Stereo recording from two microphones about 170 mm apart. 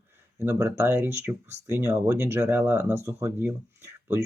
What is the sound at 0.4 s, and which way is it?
Speech, 15° right (ahead or behind).